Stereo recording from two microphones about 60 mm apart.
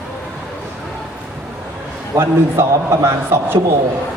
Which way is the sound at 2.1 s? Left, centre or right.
Right.